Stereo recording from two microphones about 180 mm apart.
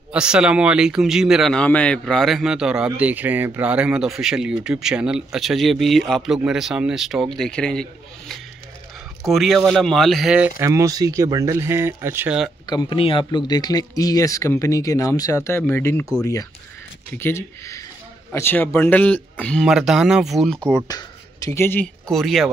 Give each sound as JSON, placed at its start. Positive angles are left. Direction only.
{"t": 0.1, "sound": "a man's voice", "side_deg": -5}
{"t": 10.6, "sound": "speech", "side_deg": -15}
{"t": 12.6, "sound": "a man's voice", "side_deg": 25}
{"t": 21.5, "sound": "a man's voice", "side_deg": 15}